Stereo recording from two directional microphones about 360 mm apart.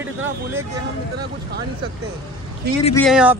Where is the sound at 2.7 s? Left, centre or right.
Right.